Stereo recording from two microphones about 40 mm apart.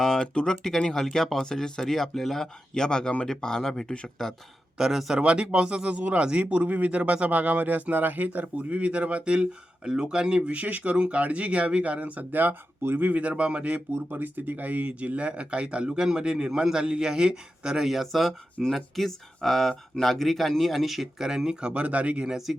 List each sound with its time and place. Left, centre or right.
0.0 s speech: centre
4.8 s speech: centre
5.1 s a man's voice: right
6.0 s a man's voice: right
10.5 s speech: right
12.3 s speech: right
13.9 s a man's voice: right; by 17.8 s centre
17.8 s speech: centre
21.7 s speech: right
22.5 s speech: centre